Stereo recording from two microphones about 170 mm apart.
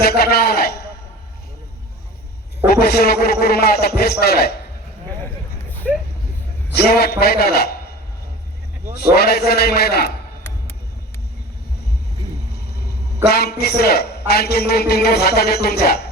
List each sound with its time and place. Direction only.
0.0 s a sound: 70° left (ahead or behind)
2.6 s a man's voice: 65° left (ahead or behind)
6.7 s a man's voice: 70° left (ahead or behind)
9.1 s a man's voice: 70° left (ahead or behind)
13.2 s a man's voice: 70° left (ahead or behind)